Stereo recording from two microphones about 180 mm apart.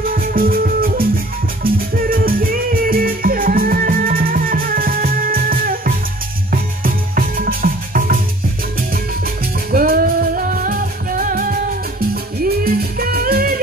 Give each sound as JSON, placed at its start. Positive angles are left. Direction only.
{"t": 0.1, "sound": "music", "side_deg": -50}
{"t": 9.7, "sound": "music", "side_deg": -55}